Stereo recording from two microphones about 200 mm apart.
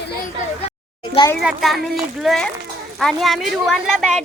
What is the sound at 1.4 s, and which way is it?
Speech, centre (ahead or behind).